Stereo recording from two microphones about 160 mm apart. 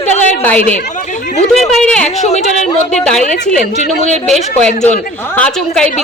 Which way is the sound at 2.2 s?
45° left (ahead or behind).